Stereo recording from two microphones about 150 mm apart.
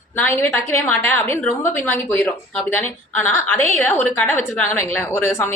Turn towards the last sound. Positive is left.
turn(degrees=15)  # may be behind; listen again after turning